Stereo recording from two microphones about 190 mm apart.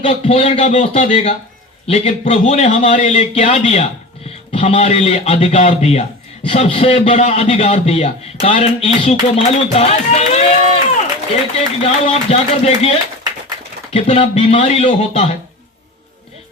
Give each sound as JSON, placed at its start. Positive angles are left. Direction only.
{"t": 0.0, "sound": "a man's voice", "side_deg": 35}